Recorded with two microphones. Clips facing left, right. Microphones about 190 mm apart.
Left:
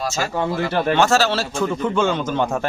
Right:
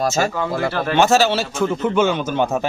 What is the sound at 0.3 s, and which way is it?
Speech, 20° left (ahead or behind).